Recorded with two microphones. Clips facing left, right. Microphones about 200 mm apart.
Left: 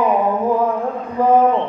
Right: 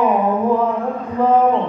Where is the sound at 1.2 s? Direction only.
10° left (ahead or behind).